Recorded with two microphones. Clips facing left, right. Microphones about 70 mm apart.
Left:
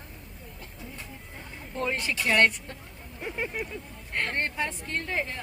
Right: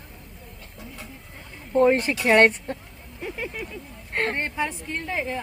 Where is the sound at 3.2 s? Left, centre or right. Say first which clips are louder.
Right 1 dB; centre.